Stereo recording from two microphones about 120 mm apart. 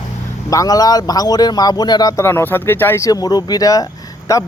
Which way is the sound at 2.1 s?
20° left (ahead or behind).